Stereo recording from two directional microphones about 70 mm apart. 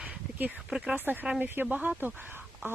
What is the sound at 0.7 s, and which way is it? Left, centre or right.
Speech, centre.